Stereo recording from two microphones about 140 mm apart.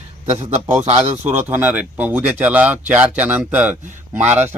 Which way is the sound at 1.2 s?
15° right (ahead or behind).